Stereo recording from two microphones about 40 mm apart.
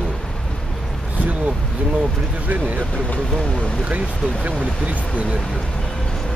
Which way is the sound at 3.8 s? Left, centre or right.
Right.